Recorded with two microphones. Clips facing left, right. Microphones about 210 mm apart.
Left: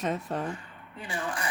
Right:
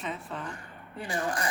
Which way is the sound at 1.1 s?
40° right (ahead or behind).